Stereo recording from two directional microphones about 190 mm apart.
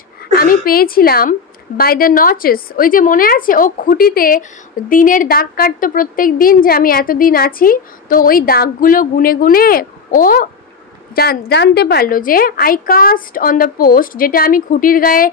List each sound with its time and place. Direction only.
0.2 s a woman's voice: 50° left (ahead or behind)